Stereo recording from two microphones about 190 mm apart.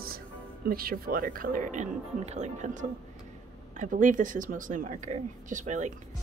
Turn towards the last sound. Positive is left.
turn(degrees=-40)  # may be behind; listen again after turning